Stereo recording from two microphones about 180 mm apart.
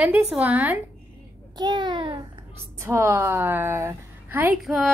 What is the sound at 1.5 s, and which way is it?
Speech, 25° right (ahead or behind).